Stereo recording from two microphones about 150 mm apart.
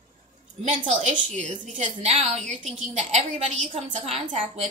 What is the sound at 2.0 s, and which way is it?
A woman's voice, 45° right (ahead or behind).